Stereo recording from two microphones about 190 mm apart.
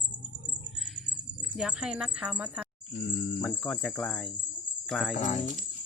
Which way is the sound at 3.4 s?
5° left (ahead or behind).